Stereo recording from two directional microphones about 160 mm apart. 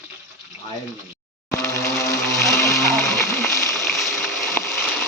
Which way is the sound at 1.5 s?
20° left (ahead or behind).